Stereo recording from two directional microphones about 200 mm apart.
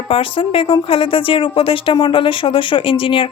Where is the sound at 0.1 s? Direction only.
25° left (ahead or behind).